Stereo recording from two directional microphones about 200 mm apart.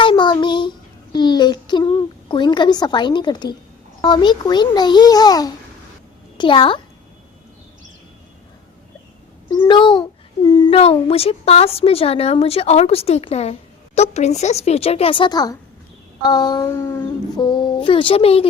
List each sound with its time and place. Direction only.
0.0 s child singing: 25° left (ahead or behind)
2.3 s a child's voice: 25° left (ahead or behind)
9.5 s a child's voice: 20° left (ahead or behind)